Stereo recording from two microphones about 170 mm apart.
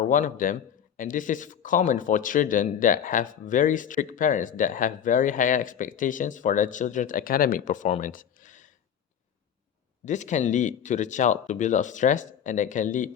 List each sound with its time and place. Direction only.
0.0 s a man's voice: 50° left (ahead or behind)
10.1 s a man's voice: 45° left (ahead or behind)